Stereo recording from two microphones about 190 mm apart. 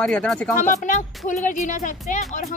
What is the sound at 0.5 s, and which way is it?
Speech, 40° left (ahead or behind).